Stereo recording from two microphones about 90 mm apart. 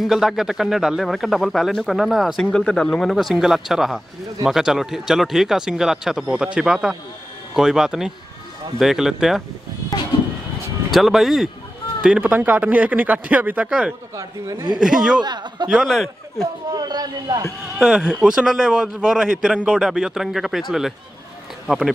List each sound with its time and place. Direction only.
0.0 s speech: centre (ahead or behind)
2.4 s a man's voice: 10° left (ahead or behind)
10.9 s speech: centre (ahead or behind)
12.2 s a man's voice: 20° right (ahead or behind)
14.1 s a man's voice: 45° right (ahead or behind)
14.8 s a man's voice: 5° right (ahead or behind)
15.2 s a man's voice: 50° right (ahead or behind)
15.7 s speech: centre (ahead or behind)
16.7 s a man's voice: 50° right (ahead or behind)
17.7 s a man's voice: 5° right (ahead or behind)